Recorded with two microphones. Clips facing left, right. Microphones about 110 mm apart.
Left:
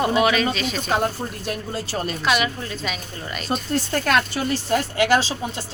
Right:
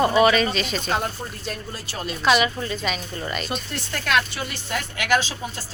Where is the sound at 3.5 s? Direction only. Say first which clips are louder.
Left 7 dB; 40° left (ahead or behind).